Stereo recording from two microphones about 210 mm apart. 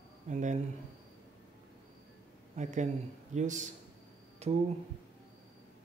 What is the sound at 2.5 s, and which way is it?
A man's voice, 35° right (ahead or behind).